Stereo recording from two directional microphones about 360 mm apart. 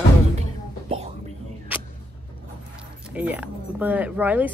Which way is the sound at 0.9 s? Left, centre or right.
Centre.